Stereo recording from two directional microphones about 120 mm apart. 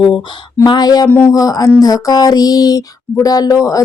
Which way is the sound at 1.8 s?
30° left (ahead or behind).